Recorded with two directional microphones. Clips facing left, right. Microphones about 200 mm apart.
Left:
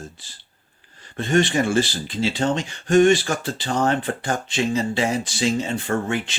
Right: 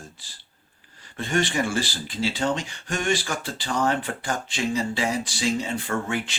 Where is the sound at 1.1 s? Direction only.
25° left (ahead or behind).